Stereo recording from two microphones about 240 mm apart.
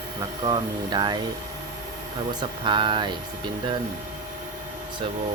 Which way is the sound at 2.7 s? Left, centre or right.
Centre.